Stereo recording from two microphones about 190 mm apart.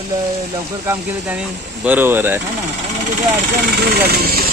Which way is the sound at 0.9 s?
5° right (ahead or behind).